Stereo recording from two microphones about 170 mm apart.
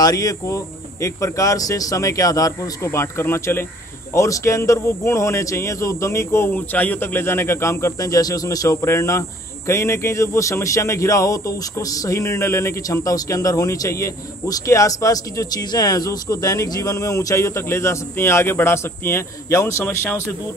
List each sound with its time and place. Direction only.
0.0 s speech: 20° left (ahead or behind)